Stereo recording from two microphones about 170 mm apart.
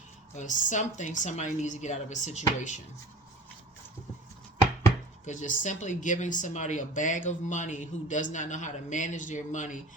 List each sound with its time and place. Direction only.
0.3 s speech: 45° left (ahead or behind)
5.2 s speech: 45° left (ahead or behind)